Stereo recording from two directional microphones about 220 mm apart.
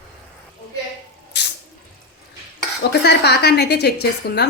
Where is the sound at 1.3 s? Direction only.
50° left (ahead or behind).